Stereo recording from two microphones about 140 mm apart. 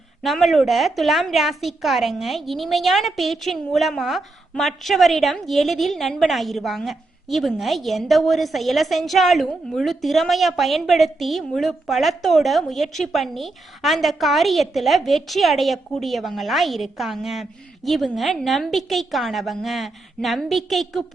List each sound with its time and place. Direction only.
0.2 s a woman's voice: centre (ahead or behind)